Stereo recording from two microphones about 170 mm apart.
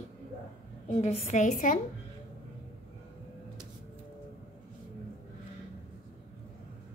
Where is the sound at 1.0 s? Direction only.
40° left (ahead or behind).